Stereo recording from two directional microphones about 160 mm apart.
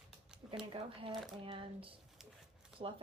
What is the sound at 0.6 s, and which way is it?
Speech, 35° right (ahead or behind).